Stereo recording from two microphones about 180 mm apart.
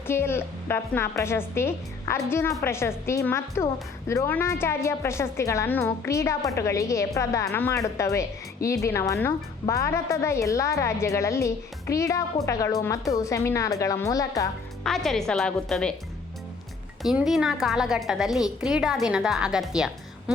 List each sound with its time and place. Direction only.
0.1 s a woman's voice: 15° left (ahead or behind)
14.8 s a woman's voice: centre (ahead or behind)
17.0 s a woman's voice: centre (ahead or behind)